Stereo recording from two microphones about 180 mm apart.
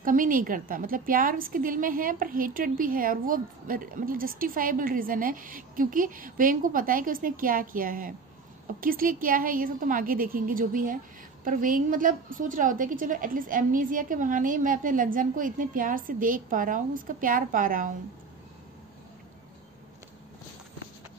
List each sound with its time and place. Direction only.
0.0 s a woman's voice: 50° right (ahead or behind)